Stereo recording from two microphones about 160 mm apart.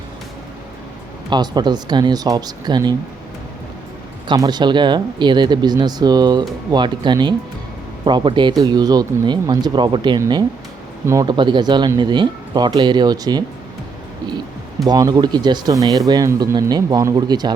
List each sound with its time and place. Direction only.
1.3 s speech: 25° right (ahead or behind)
4.3 s speech: 25° right (ahead or behind)
14.8 s speech: 25° right (ahead or behind)